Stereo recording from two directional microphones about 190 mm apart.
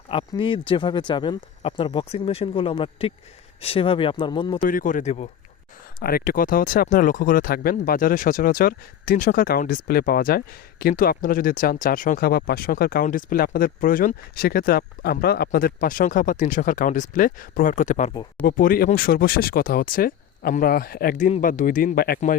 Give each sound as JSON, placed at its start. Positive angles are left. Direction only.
{"t": 0.1, "sound": "speech", "side_deg": 25}
{"t": 4.6, "sound": "speech", "side_deg": 45}
{"t": 6.0, "sound": "speech", "side_deg": 50}